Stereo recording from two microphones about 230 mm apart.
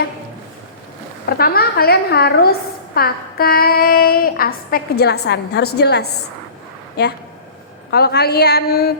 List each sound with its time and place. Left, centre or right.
1.4 s a woman's voice: left